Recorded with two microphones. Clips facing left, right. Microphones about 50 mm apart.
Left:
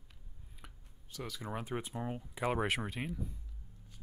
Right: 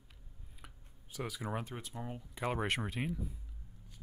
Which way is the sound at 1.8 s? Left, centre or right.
Left.